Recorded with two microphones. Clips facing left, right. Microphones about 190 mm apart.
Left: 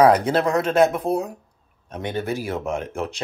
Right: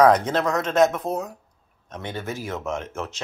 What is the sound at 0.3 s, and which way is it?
Speech, 30° left (ahead or behind).